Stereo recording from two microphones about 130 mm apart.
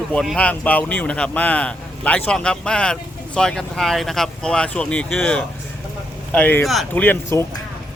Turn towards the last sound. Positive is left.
turn(degrees=20)  # may be behind; listen again after turning